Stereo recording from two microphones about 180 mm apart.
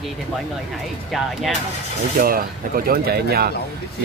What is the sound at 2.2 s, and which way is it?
Speech, 50° right (ahead or behind).